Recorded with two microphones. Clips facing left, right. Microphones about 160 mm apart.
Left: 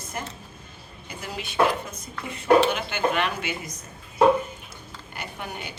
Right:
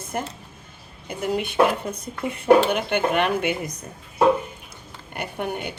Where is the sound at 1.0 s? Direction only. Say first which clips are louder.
Right 10 dB; 55° right (ahead or behind).